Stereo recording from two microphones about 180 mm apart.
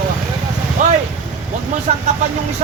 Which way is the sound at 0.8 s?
45° right (ahead or behind).